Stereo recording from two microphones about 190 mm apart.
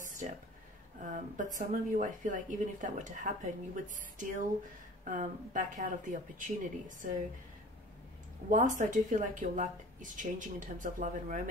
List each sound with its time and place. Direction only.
0.2 s a sound: 40° right (ahead or behind)
1.0 s speech: 40° right (ahead or behind)
8.5 s speech: 45° right (ahead or behind)